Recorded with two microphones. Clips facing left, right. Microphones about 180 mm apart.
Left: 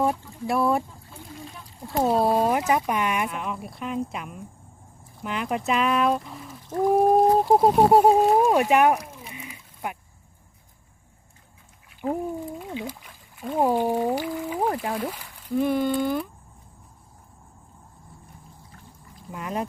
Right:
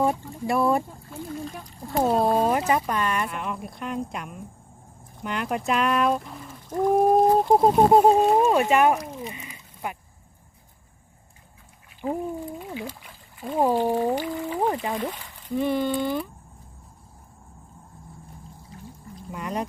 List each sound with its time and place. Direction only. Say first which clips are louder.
0.0 s speech: right 1 dB; centre (ahead or behind)
3.2 s speech: even; centre (ahead or behind)
9.0 s a sound: right 5 dB; 5° left (ahead or behind)
12.7 s speech: left 1 dB; 20° left (ahead or behind)
13.5 s speech: even; 5° left (ahead or behind)
19.3 s speech: even; centre (ahead or behind)